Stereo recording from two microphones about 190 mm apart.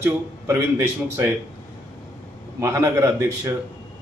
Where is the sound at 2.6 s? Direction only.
15° right (ahead or behind).